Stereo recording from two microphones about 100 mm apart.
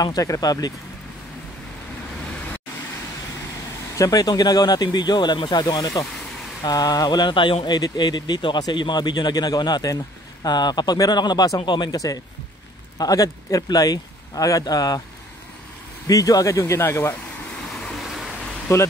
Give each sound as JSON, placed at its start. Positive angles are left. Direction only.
{"t": 0.0, "sound": "speech", "side_deg": 35}
{"t": 3.9, "sound": "speech", "side_deg": 35}
{"t": 16.1, "sound": "speech", "side_deg": 35}
{"t": 17.7, "sound": "vehicle", "side_deg": 5}
{"t": 18.7, "sound": "speech", "side_deg": 30}